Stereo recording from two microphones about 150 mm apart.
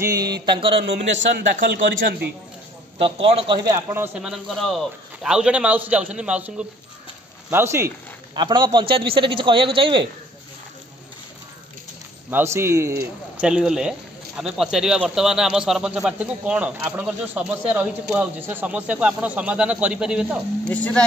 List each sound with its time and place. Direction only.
0.0 s a man's voice: 25° right (ahead or behind); by 1.3 s 50° right (ahead or behind)
1.7 s a man's voice: 85° right
3.0 s a man's voice: 35° right (ahead or behind)
3.7 s a man's voice: 15° right (ahead or behind)
4.2 s a man's voice: centre (ahead or behind); by 7.9 s 15° right (ahead or behind)
8.4 s a man's voice: 30° right (ahead or behind)
12.3 s a man's voice: 15° right (ahead or behind)
13.4 s a man's voice: 5° right (ahead or behind)
20.6 s speech: 10° left (ahead or behind)